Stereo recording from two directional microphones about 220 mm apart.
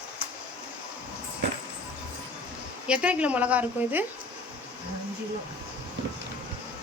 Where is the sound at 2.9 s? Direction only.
5° right (ahead or behind).